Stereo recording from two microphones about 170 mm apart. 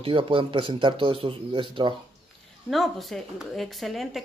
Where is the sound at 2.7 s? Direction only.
Centre (ahead or behind).